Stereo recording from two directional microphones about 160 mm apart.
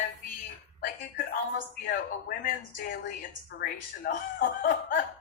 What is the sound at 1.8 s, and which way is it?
A woman's voice, 65° left (ahead or behind).